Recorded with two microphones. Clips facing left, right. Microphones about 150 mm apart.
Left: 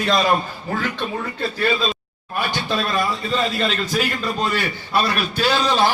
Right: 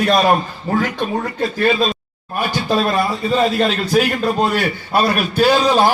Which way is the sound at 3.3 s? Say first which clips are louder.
Right 6 dB; 45° right (ahead or behind).